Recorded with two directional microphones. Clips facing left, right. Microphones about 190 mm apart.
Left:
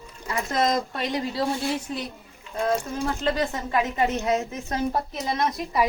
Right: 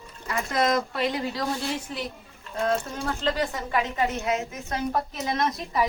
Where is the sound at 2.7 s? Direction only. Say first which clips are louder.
Left 2 dB; 20° left (ahead or behind).